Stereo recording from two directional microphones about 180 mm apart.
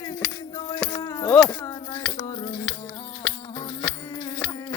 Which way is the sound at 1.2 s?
10° left (ahead or behind).